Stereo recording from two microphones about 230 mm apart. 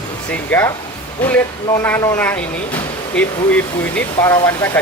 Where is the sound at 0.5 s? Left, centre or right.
Centre.